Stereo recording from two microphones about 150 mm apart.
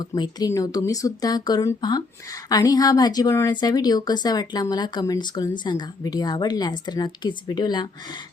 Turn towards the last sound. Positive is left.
turn(degrees=30)  # may be behind; listen again after turning